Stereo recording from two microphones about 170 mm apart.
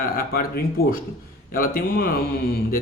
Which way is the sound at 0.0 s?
60° left (ahead or behind).